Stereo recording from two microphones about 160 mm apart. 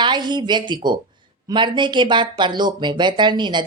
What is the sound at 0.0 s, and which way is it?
Speech, 30° right (ahead or behind).